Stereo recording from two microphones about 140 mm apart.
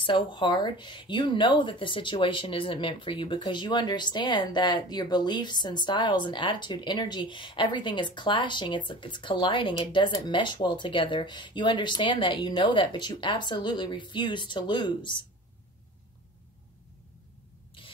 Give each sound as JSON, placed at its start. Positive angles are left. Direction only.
{"t": 0.0, "sound": "speech", "side_deg": 35}
{"t": 17.8, "sound": "rub", "side_deg": 40}